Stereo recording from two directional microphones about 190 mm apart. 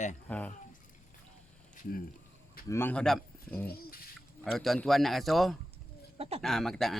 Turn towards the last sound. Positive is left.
turn(degrees=0)  # may be behind; listen again after turning